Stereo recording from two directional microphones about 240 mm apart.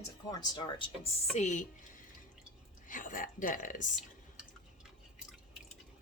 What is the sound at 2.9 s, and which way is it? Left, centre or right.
Speech, left.